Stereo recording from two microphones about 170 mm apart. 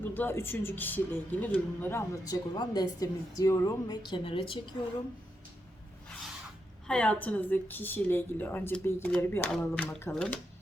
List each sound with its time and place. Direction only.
0.0 s a woman's voice: 10° left (ahead or behind); by 4.6 s 30° left (ahead or behind)
6.8 s a woman's voice: 5° left (ahead or behind)